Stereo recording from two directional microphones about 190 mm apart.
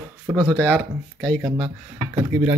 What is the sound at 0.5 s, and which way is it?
Speech, 5° left (ahead or behind).